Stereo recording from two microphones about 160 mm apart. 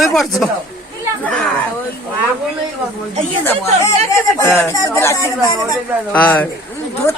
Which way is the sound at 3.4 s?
20° left (ahead or behind).